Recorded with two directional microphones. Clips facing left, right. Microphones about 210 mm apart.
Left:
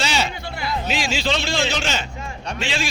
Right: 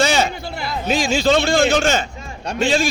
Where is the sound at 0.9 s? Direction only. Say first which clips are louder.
Right 9 dB; 45° right (ahead or behind).